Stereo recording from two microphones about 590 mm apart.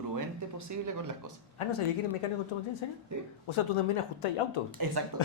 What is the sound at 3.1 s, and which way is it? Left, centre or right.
Speech, right.